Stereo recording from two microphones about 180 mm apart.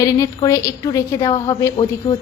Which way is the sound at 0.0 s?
20° left (ahead or behind).